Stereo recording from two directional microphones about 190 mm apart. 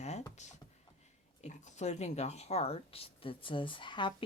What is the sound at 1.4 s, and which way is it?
Speech, 40° left (ahead or behind).